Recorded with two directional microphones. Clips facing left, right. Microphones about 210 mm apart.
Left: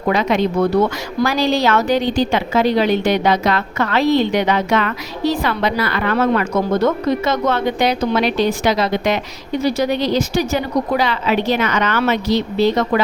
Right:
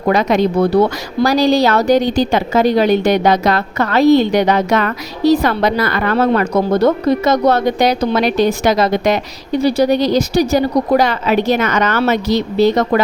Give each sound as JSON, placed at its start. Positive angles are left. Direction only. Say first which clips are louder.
{"t": 0.1, "sound": "a woman's voice", "louder": "right 3 dB", "side_deg": -40}